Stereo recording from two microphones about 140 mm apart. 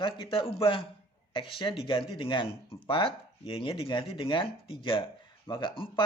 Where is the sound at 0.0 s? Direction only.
40° left (ahead or behind).